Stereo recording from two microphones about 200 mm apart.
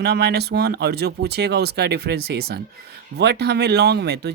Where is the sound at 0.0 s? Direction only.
55° right (ahead or behind).